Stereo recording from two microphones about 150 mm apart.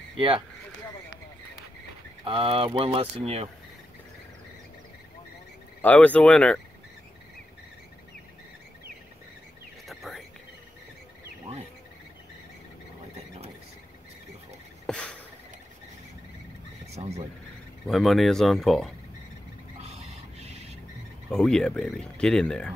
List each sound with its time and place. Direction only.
2.2 s speech: 35° right (ahead or behind)
5.8 s speech: 10° left (ahead or behind)
9.8 s whispering: centre (ahead or behind)
14.9 s a sound: 5° left (ahead or behind)
17.0 s speech: 35° right (ahead or behind)
17.8 s speech: centre (ahead or behind)
19.8 s a sound: 45° right (ahead or behind)
21.3 s speech: 5° left (ahead or behind)